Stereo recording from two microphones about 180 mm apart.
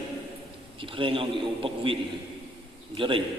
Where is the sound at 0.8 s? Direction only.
30° right (ahead or behind).